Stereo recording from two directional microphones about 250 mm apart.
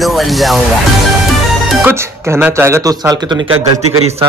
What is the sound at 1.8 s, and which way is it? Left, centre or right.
Speech, centre.